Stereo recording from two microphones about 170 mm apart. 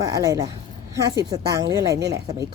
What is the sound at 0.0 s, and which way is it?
Speech, 20° right (ahead or behind).